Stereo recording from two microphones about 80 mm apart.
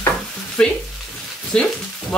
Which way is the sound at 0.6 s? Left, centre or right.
Centre.